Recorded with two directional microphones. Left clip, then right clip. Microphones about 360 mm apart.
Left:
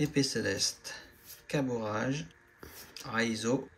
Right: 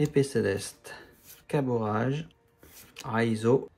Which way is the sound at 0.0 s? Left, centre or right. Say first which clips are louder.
Right 5 dB; centre.